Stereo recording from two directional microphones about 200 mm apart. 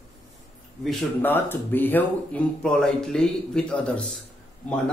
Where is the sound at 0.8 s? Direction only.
5° left (ahead or behind).